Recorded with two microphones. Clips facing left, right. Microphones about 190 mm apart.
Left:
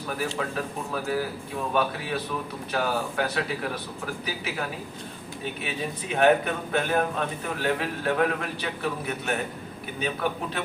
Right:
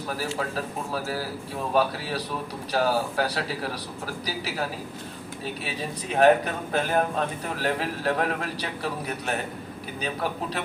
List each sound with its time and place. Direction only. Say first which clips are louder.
0.2 s a man's voice: left 2 dB; 35° right (ahead or behind)
6.1 s a man's voice: right 2 dB; 35° right (ahead or behind)